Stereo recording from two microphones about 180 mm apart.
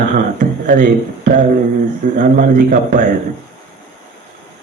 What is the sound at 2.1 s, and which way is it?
Speech, 50° right (ahead or behind).